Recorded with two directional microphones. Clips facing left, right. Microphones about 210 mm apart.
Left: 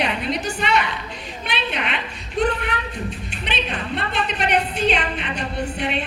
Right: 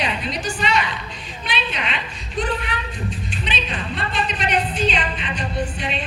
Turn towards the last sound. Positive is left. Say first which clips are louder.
# left 1 dB
turn(degrees=60)  # may be behind; listen again after turning